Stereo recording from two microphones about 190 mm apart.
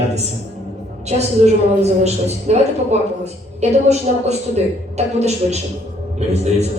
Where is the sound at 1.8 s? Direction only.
35° right (ahead or behind).